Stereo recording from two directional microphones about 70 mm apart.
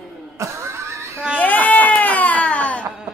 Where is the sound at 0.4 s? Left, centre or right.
Right.